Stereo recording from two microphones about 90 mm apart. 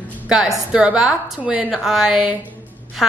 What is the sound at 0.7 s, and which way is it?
A woman's voice, 10° right (ahead or behind).